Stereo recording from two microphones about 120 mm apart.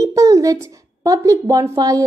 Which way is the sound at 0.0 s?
25° right (ahead or behind).